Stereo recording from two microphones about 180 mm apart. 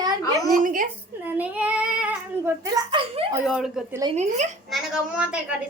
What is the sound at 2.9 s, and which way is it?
Speech, 30° right (ahead or behind).